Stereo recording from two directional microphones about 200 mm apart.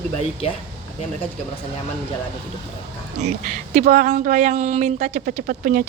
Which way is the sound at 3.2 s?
35° right (ahead or behind).